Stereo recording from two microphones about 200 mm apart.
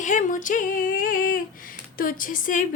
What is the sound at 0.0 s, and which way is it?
Speech, 40° left (ahead or behind).